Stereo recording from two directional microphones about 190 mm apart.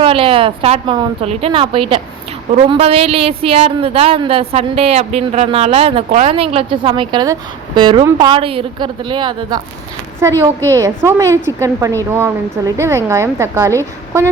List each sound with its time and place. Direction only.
0.0 s a woman's voice: 30° right (ahead or behind)